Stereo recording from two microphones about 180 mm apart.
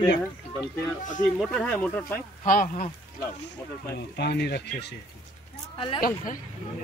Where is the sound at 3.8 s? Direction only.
65° left (ahead or behind).